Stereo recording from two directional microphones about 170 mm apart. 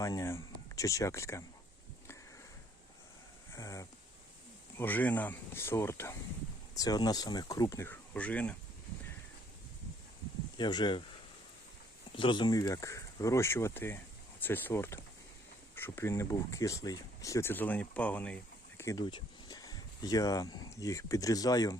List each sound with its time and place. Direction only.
0.0 s speech: 20° left (ahead or behind)
3.5 s a sound: 20° left (ahead or behind)
4.8 s speech: 10° left (ahead or behind)
10.6 s speech: 25° left (ahead or behind)
12.1 s speech: 30° left (ahead or behind); by 18.3 s 10° left (ahead or behind)
18.8 s speech: 20° left (ahead or behind)